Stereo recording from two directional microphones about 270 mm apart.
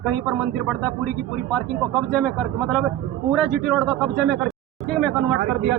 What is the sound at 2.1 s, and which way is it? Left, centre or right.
A man's voice, centre.